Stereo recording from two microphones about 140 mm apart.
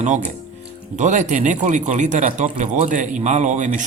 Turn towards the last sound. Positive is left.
turn(degrees=-60)  # may be behind; listen again after turning